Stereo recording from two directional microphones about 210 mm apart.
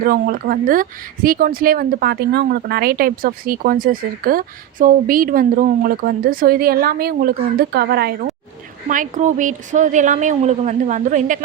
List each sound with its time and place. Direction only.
0.0 s speech: 45° right (ahead or behind)
8.9 s a woman's voice: 35° right (ahead or behind)